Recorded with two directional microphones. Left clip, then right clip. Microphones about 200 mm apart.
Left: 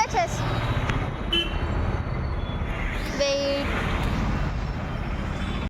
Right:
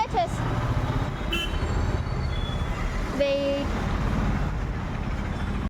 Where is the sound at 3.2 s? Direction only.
35° right (ahead or behind).